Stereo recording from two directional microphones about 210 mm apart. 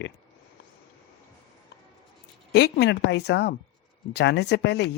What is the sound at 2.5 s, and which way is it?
Speech, 50° left (ahead or behind).